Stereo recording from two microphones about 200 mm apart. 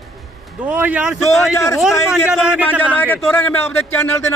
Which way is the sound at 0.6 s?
5° right (ahead or behind).